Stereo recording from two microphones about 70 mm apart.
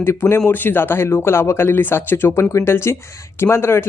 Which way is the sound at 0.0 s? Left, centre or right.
Left.